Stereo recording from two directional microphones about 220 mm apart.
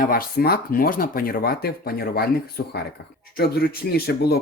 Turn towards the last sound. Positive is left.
turn(degrees=45)  # may be behind; listen again after turning